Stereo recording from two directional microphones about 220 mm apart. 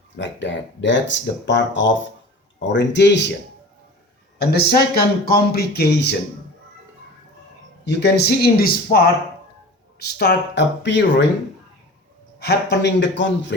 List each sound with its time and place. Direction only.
0.2 s speech: 55° left (ahead or behind)
4.4 s speech: 45° left (ahead or behind)
7.9 s speech: 50° left (ahead or behind)
10.0 s speech: 45° left (ahead or behind)
12.4 s speech: 50° left (ahead or behind)